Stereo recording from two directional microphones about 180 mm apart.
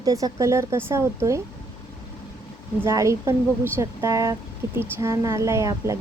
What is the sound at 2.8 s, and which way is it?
Speech, 15° right (ahead or behind).